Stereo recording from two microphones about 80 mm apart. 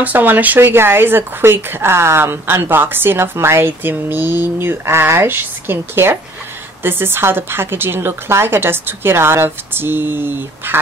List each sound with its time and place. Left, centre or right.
0.0 s speech: right